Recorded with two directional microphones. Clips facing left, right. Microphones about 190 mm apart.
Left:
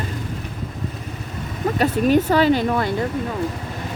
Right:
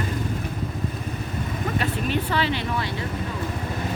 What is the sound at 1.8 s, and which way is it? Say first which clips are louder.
Speech: left 12 dB; 45° left (ahead or behind).